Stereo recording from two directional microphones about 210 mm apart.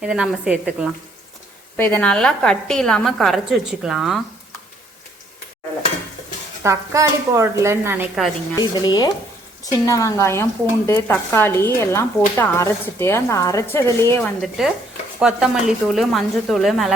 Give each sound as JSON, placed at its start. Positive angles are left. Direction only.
{"t": 0.0, "sound": "a woman's voice", "side_deg": -5}
{"t": 1.7, "sound": "a woman's voice", "side_deg": 10}
{"t": 6.6, "sound": "speech", "side_deg": -15}
{"t": 8.7, "sound": "a woman's voice", "side_deg": 20}
{"t": 14.4, "sound": "a woman's voice", "side_deg": 0}